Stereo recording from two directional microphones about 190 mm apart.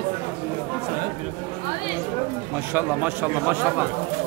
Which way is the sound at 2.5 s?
10° right (ahead or behind).